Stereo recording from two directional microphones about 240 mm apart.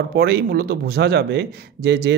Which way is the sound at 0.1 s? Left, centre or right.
Right.